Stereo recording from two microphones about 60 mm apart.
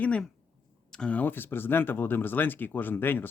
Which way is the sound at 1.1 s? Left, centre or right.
Left.